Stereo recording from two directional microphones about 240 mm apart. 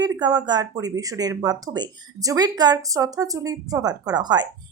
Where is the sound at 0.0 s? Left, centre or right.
Centre.